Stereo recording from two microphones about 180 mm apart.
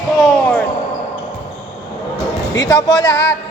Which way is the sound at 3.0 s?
75° left (ahead or behind).